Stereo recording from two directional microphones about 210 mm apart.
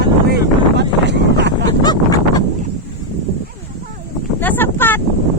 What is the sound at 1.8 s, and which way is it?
Speech, 20° left (ahead or behind).